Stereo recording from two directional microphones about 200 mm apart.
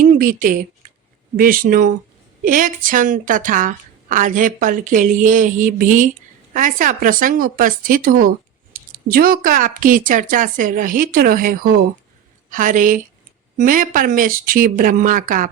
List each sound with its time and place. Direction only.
0.0 s a woman's voice: 40° right (ahead or behind)